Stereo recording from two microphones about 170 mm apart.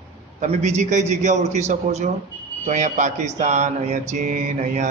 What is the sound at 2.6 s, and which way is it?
Mantra, 45° right (ahead or behind).